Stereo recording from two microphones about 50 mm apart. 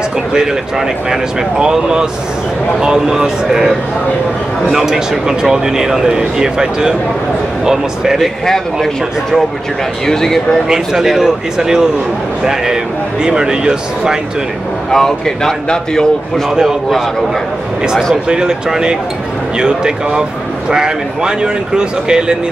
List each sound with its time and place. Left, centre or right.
0.3 s speech: centre
4.7 s speech: centre
10.0 s speech: centre
10.7 s speech: centre
13.2 s speech: centre
14.9 s speech: centre
16.4 s a man's voice: centre
18.1 s speech: centre